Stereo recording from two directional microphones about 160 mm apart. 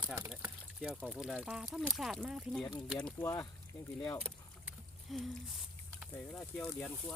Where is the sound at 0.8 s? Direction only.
5° right (ahead or behind); by 3.5 s 10° left (ahead or behind).